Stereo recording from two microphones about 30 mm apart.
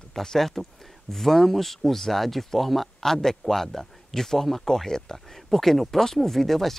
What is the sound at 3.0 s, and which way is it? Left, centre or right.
Speech, centre.